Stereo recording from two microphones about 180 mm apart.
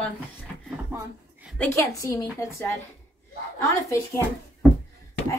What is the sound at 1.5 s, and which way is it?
A woman's voice, 15° left (ahead or behind).